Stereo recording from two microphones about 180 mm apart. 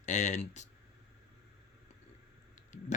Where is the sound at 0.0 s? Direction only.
40° left (ahead or behind).